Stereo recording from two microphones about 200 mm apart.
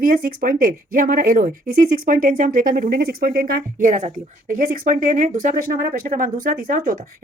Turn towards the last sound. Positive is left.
turn(degrees=-45)  # may be behind; listen again after turning